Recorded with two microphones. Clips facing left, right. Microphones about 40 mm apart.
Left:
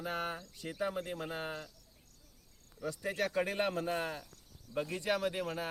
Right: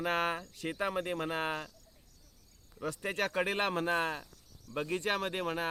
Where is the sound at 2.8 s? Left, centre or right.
Right.